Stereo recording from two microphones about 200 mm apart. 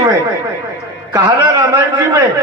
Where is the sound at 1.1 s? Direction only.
15° right (ahead or behind).